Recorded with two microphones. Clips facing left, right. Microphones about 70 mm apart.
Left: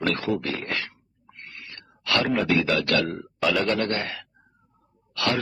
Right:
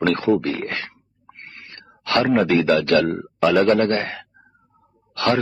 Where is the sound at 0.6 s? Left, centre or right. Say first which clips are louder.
Right 3 dB; right.